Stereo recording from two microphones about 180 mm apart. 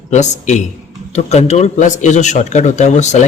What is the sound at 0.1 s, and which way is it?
Speech, 40° left (ahead or behind).